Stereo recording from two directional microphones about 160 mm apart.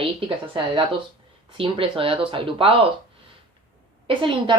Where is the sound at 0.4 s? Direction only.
30° right (ahead or behind).